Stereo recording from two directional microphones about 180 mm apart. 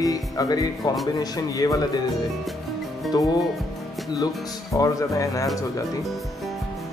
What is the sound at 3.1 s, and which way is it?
Speech, 25° left (ahead or behind).